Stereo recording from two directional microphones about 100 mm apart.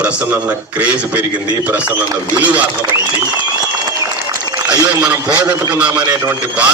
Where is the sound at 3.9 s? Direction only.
30° right (ahead or behind).